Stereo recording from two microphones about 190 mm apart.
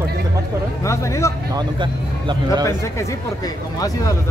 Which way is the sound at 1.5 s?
25° right (ahead or behind).